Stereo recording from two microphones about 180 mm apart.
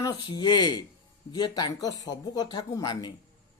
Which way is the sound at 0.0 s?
20° left (ahead or behind).